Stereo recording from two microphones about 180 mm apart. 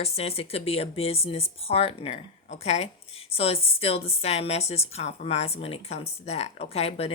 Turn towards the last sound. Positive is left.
turn(degrees=35)  # may be behind; listen again after turning